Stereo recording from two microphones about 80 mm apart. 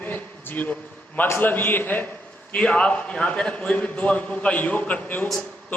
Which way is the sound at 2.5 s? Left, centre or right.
Centre.